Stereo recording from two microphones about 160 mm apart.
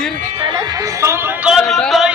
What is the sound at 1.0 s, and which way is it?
Speech, 15° right (ahead or behind).